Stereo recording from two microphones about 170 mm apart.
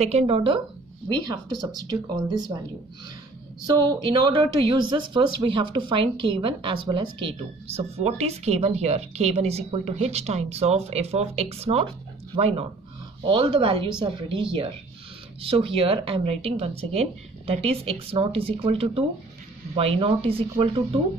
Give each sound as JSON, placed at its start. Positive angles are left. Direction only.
{"t": 0.0, "sound": "a woman's voice", "side_deg": -35}
{"t": 3.6, "sound": "a woman's voice", "side_deg": -25}
{"t": 15.4, "sound": "a woman's voice", "side_deg": -30}